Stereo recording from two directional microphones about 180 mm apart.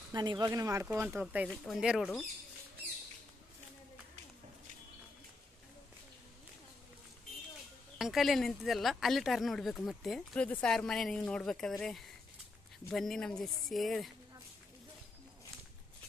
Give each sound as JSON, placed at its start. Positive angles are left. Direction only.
{"t": 0.1, "sound": "speech", "side_deg": -25}
{"t": 8.0, "sound": "speech", "side_deg": 0}
{"t": 12.9, "sound": "speech", "side_deg": 0}